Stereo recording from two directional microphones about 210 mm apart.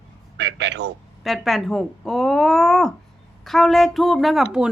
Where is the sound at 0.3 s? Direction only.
60° right (ahead or behind).